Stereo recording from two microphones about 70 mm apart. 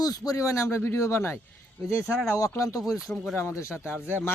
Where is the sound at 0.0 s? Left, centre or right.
Left.